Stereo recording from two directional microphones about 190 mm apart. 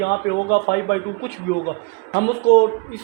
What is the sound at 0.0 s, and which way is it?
Speech, 55° left (ahead or behind).